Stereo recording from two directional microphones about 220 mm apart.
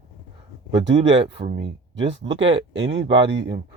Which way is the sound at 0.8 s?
55° right (ahead or behind).